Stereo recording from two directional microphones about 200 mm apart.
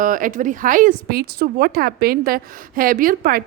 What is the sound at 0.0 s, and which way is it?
A woman's voice, 40° right (ahead or behind).